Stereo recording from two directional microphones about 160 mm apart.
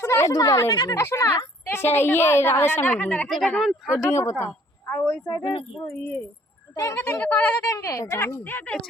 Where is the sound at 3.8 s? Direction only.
15° left (ahead or behind).